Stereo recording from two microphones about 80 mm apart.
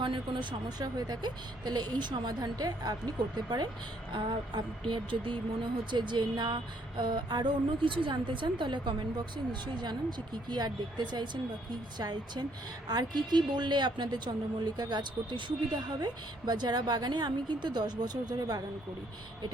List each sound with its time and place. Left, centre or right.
0.0 s speech: right
0.9 s a woman's voice: right
4.1 s speech: right
5.9 s speech: right
9.5 s a woman's voice: right